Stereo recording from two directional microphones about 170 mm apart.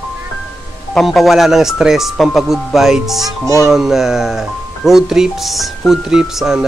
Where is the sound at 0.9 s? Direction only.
Centre (ahead or behind).